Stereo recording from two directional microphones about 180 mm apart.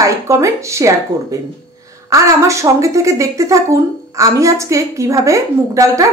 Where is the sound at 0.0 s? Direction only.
15° right (ahead or behind).